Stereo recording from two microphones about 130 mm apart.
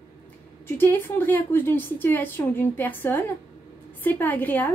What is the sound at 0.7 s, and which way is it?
A woman's voice, 15° left (ahead or behind).